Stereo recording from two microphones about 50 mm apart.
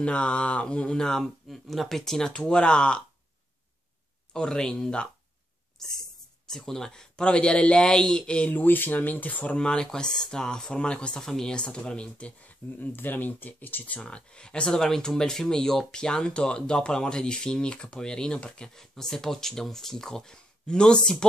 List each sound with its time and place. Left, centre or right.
0.0 s speech: left
4.3 s speech: centre
5.8 s speech: centre
8.5 s speech: left
9.6 s speech: centre
11.2 s speech: centre; by 13.9 s left
14.0 s speech: centre